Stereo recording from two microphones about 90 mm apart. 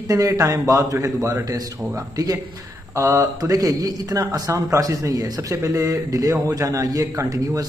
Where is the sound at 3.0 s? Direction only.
40° right (ahead or behind).